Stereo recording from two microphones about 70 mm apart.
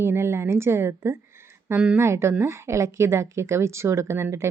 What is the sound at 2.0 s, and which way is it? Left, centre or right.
A woman's voice, right.